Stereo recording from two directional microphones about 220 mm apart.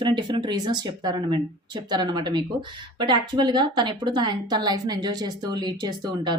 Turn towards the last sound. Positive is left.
turn(degrees=-20)  # may be behind; listen again after turning